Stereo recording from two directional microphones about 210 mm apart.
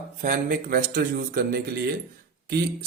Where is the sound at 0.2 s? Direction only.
40° right (ahead or behind).